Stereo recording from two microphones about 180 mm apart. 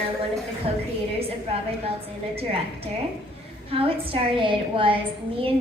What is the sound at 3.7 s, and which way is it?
A woman's voice, 30° right (ahead or behind).